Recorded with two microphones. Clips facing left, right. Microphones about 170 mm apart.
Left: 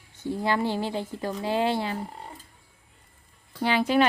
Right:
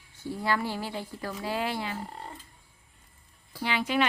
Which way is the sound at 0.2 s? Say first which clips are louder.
Left 4 dB; 20° left (ahead or behind).